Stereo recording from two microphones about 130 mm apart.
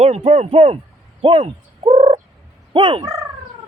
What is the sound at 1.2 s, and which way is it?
Turkey, 45° right (ahead or behind).